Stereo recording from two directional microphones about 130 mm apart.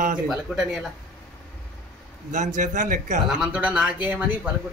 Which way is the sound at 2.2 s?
75° right (ahead or behind).